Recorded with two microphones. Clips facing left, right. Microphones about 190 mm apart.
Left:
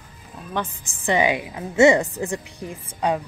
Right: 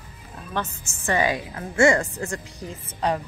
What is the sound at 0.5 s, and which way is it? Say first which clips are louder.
A woman's voice: left 2 dB; 15° left (ahead or behind).